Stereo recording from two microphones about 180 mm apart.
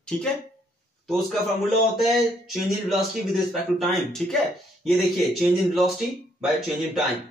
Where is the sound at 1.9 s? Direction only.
Centre (ahead or behind).